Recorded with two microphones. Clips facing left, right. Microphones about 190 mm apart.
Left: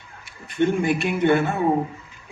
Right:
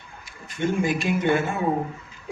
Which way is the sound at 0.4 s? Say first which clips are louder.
Left 4 dB; 60° left (ahead or behind).